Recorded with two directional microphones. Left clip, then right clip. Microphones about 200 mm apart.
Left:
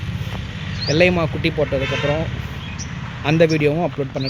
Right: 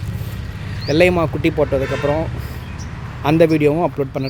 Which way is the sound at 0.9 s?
10° right (ahead or behind).